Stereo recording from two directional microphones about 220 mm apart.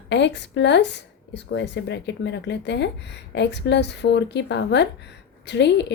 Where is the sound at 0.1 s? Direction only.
50° left (ahead or behind).